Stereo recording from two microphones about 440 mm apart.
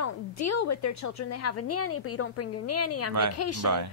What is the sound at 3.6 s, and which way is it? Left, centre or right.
Speech, right.